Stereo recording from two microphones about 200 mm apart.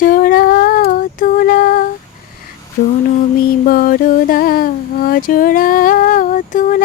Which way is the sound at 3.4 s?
45° left (ahead or behind).